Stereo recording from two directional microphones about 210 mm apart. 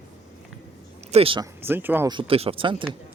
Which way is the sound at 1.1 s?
25° right (ahead or behind).